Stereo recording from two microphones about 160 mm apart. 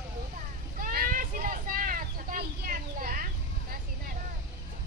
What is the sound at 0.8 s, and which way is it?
Vehicle, 60° right (ahead or behind).